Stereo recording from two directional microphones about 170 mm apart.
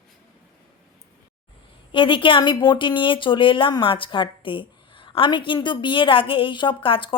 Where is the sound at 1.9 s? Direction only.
30° left (ahead or behind).